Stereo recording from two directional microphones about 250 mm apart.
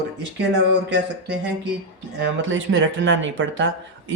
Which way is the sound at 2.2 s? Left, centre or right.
Right.